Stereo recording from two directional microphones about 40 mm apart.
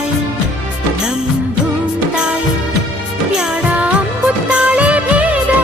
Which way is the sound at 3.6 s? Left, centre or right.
Right.